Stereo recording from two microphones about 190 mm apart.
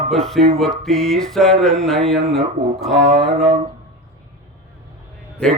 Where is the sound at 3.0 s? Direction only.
35° right (ahead or behind).